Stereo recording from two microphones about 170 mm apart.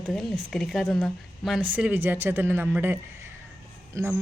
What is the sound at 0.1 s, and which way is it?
A woman's voice, centre (ahead or behind).